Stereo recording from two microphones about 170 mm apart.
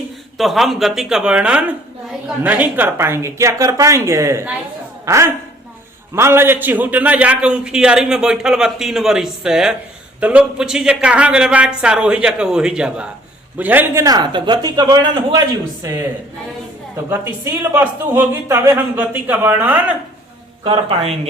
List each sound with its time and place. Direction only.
0.3 s a man's voice: centre (ahead or behind); by 16.0 s 20° right (ahead or behind)
17.1 s speech: 15° right (ahead or behind)
20.7 s speech: 35° right (ahead or behind)